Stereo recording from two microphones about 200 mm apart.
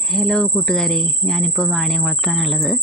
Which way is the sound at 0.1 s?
5° left (ahead or behind).